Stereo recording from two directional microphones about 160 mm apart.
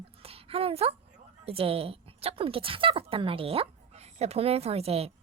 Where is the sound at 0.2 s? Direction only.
40° right (ahead or behind).